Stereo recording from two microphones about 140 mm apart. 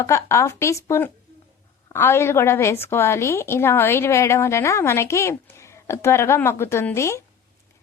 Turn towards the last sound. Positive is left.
turn(degrees=20)  # may be behind; listen again after turning